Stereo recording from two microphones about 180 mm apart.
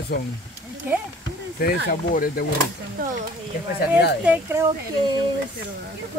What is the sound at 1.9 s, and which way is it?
Speech, 55° left (ahead or behind).